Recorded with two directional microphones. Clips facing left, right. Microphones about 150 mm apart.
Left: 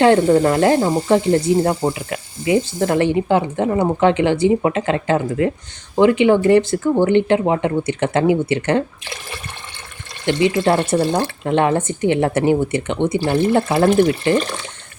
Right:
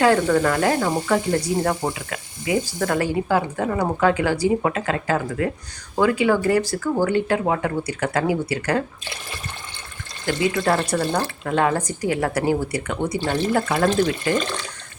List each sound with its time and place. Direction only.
0.0 s speech: 30° left (ahead or behind)
10.2 s speech: 25° left (ahead or behind)